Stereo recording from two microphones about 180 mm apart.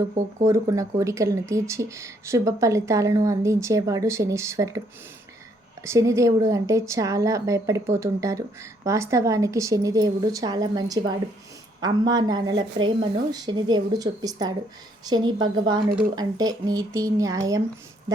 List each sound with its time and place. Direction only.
0.1 s speech: 40° right (ahead or behind)
0.4 s a woman's voice: 15° right (ahead or behind)
5.8 s a woman's voice: 15° right (ahead or behind)